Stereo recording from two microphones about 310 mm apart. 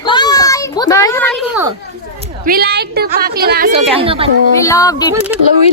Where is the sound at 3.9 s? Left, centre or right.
Centre.